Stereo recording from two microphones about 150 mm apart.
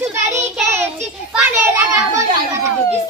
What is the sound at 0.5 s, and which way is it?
Child singing, 15° right (ahead or behind).